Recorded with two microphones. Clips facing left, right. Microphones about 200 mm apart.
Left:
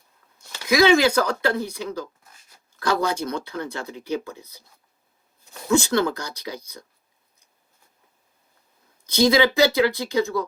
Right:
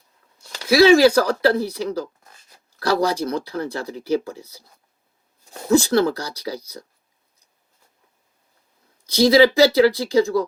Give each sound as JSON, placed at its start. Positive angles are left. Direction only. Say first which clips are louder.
{"t": 0.5, "sound": "speech", "louder": "right 4 dB", "side_deg": -35}
{"t": 5.6, "sound": "speech", "louder": "right 4 dB", "side_deg": -35}
{"t": 9.2, "sound": "speech", "louder": "right 4 dB", "side_deg": -35}